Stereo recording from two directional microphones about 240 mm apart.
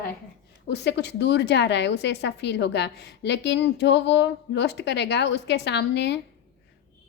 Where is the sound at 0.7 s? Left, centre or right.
Left.